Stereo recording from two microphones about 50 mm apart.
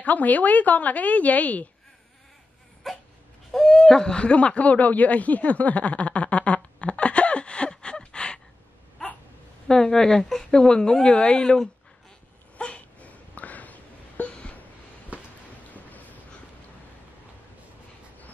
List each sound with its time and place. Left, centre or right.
0.0 s a woman's voice: left
2.8 s dog: centre
3.5 s owl: centre
9.7 s a woman's voice: centre
12.5 s a sound: left
15.1 s a sound: right
15.7 s boat: left